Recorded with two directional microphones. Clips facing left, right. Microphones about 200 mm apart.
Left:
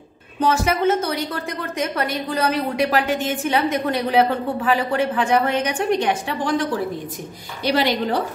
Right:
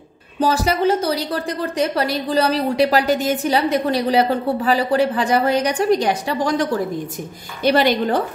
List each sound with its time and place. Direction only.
0.4 s a woman's voice: 35° right (ahead or behind)
7.6 s a woman's voice: 50° right (ahead or behind)